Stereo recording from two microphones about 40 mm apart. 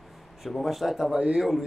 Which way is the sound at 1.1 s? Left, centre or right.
Right.